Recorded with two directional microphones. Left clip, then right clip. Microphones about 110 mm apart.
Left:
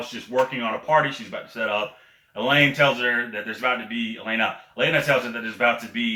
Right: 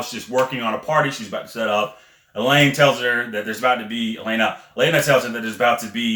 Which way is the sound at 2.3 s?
30° right (ahead or behind).